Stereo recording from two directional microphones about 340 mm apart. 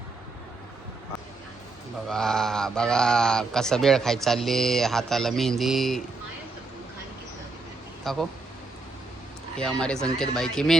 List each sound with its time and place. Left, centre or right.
2.0 s speech: centre
8.1 s speech: centre
9.6 s speech: centre